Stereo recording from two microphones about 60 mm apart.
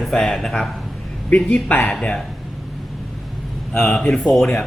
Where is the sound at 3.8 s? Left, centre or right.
Centre.